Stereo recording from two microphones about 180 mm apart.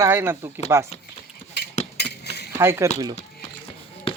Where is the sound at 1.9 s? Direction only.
65° left (ahead or behind).